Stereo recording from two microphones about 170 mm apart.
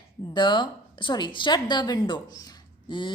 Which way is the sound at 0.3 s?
25° left (ahead or behind).